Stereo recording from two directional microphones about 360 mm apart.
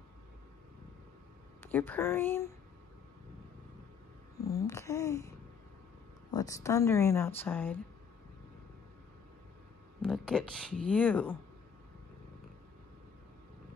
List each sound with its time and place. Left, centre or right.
1.6 s speech: centre
4.5 s speech: centre
6.3 s speech: centre
10.0 s speech: centre